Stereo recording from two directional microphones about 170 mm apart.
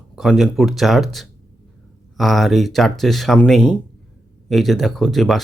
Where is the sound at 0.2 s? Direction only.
Centre (ahead or behind).